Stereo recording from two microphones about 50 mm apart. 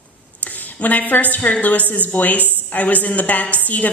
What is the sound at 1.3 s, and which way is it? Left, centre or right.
A woman's voice, left.